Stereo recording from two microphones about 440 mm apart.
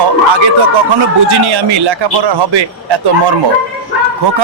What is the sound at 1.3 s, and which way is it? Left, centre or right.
A man's voice, right.